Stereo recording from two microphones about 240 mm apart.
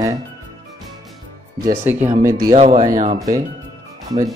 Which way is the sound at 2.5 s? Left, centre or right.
Right.